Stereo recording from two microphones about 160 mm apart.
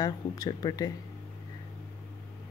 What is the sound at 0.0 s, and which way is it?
Speech, 25° left (ahead or behind).